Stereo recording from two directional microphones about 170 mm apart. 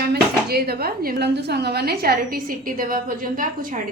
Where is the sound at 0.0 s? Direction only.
70° right (ahead or behind).